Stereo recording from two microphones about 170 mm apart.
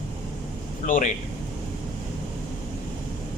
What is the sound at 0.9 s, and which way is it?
Speech, 50° left (ahead or behind).